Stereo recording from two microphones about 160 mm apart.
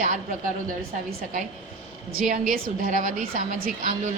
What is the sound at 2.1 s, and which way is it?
Speech, 60° right (ahead or behind).